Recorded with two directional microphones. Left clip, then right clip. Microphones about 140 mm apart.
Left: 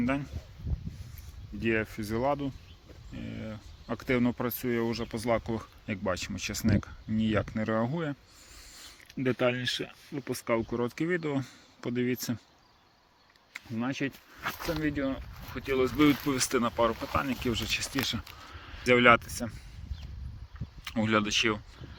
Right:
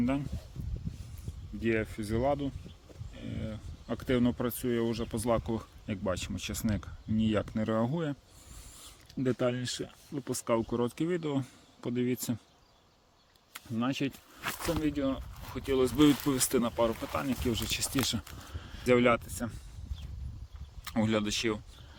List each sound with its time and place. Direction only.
0.0 s speech: 5° left (ahead or behind)
1.6 s speech: centre (ahead or behind)
5.1 s speech: 20° right (ahead or behind)
5.8 s speech: centre (ahead or behind); by 8.1 s 20° right (ahead or behind)
9.4 s speech: 20° right (ahead or behind)
13.7 s speech: 40° right (ahead or behind)
16.3 s speech: 15° right (ahead or behind)
16.9 s speech: centre (ahead or behind); by 18.9 s 25° right (ahead or behind)
18.9 s speech: centre (ahead or behind)
20.8 s speech: 5° right (ahead or behind)